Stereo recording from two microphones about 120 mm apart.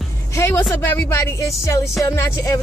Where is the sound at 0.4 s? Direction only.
20° left (ahead or behind).